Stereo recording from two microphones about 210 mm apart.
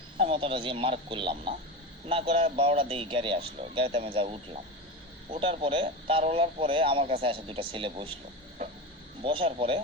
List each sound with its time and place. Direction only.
0.2 s speech: 25° right (ahead or behind)
9.2 s speech: 25° right (ahead or behind)